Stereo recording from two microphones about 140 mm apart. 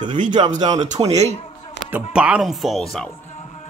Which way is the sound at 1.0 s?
50° right (ahead or behind).